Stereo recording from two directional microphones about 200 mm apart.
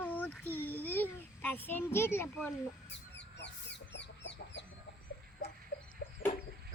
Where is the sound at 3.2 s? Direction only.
60° left (ahead or behind).